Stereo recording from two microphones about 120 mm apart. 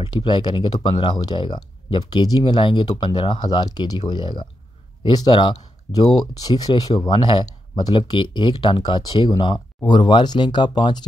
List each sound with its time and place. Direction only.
0.0 s speech: 40° left (ahead or behind)